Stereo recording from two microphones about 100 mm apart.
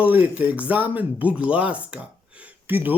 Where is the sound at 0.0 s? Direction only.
15° right (ahead or behind).